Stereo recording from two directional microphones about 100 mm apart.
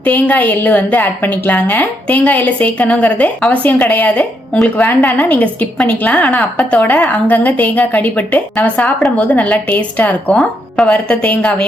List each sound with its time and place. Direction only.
0.0 s a woman's voice: 15° left (ahead or behind)